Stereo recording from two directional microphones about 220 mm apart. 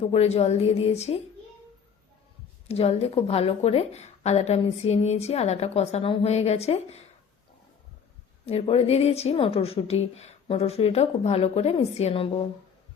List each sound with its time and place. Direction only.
0.1 s a woman's voice: 30° left (ahead or behind)
2.6 s a woman's voice: 25° left (ahead or behind)
8.4 s a woman's voice: 25° left (ahead or behind)